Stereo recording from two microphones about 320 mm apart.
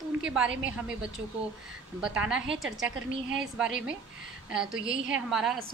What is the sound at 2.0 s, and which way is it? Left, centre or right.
A woman's voice, centre.